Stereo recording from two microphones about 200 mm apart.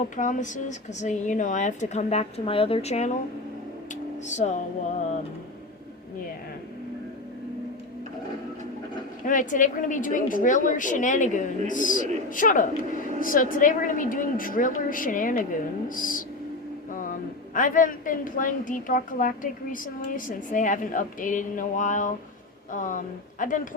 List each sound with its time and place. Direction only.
0.2 s a woman's voice: 40° left (ahead or behind)
4.4 s a woman's voice: 35° left (ahead or behind)
9.2 s a woman's voice: 40° left (ahead or behind)